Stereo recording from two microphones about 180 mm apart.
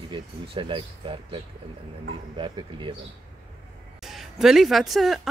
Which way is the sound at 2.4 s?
25° right (ahead or behind).